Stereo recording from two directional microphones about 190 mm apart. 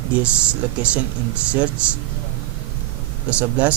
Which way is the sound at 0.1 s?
5° right (ahead or behind).